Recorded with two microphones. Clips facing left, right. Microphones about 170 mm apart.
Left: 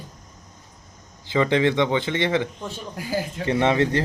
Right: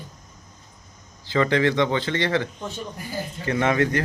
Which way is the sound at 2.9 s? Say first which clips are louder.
Left 6 dB; 90° left.